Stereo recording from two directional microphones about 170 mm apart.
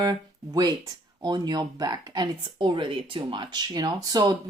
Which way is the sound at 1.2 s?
25° right (ahead or behind).